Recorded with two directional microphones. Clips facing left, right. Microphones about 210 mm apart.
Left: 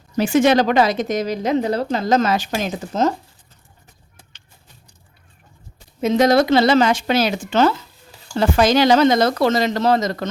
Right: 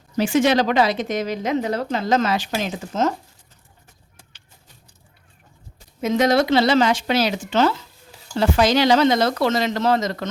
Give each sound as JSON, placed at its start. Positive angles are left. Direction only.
{"t": 0.2, "sound": "a woman's voice", "side_deg": 50}
{"t": 6.0, "sound": "speech", "side_deg": 30}